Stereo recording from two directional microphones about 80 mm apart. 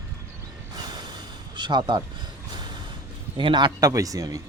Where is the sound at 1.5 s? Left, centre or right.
Right.